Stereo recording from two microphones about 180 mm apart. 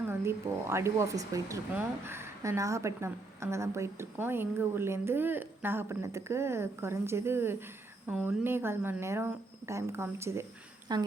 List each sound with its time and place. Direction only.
0.1 s a woman's voice: 15° right (ahead or behind)